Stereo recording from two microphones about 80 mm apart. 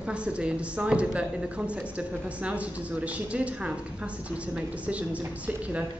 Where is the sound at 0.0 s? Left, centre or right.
Centre.